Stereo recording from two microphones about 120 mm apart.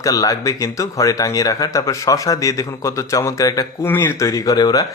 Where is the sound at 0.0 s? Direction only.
30° left (ahead or behind).